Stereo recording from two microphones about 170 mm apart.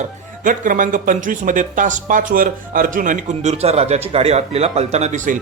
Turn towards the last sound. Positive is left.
turn(degrees=-40)  # may be behind; listen again after turning